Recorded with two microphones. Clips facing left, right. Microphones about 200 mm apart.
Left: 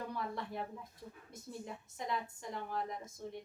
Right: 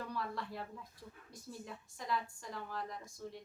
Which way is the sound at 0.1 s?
20° left (ahead or behind).